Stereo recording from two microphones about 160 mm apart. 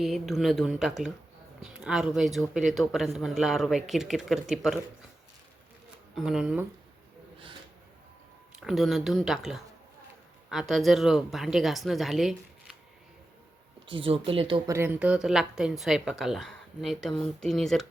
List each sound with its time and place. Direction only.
0.0 s a woman's voice: centre (ahead or behind)
6.1 s a woman's voice: 5° right (ahead or behind)
8.6 s a woman's voice: centre (ahead or behind)
13.8 s speech: 35° right (ahead or behind)
14.7 s a woman's voice: 15° right (ahead or behind); by 17.8 s centre (ahead or behind)